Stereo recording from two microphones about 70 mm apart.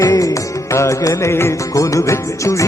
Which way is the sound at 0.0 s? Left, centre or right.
Left.